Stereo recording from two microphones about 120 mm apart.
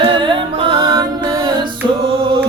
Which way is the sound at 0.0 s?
45° right (ahead or behind).